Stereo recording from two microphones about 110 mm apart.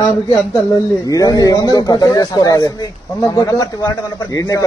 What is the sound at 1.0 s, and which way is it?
Speech, 35° left (ahead or behind).